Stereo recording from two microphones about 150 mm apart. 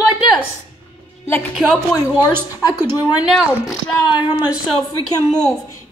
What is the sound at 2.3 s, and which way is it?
Speech, 15° right (ahead or behind).